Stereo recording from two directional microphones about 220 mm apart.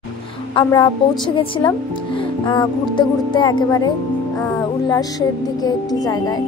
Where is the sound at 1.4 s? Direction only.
20° left (ahead or behind).